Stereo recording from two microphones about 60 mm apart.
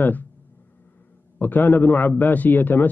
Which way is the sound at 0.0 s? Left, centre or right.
Left.